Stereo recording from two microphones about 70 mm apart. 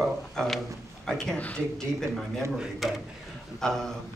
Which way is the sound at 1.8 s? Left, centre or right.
Centre.